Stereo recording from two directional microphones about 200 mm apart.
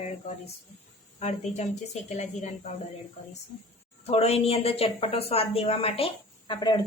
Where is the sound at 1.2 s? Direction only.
35° left (ahead or behind).